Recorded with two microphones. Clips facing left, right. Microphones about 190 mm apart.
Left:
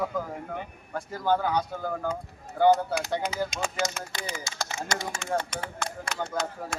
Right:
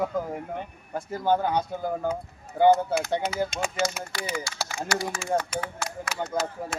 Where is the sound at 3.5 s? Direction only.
5° right (ahead or behind).